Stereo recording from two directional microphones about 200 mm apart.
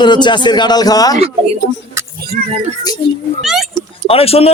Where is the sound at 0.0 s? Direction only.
20° left (ahead or behind).